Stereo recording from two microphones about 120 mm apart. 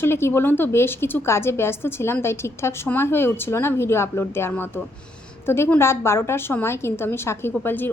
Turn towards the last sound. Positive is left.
turn(degrees=15)  # may be behind; listen again after turning